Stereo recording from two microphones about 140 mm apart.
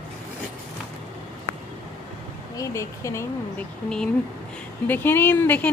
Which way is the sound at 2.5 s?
25° left (ahead or behind).